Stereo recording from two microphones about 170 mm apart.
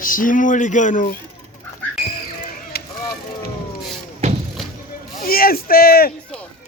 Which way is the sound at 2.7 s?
65° left (ahead or behind).